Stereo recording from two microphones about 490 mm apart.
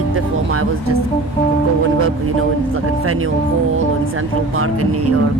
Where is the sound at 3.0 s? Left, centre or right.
Right.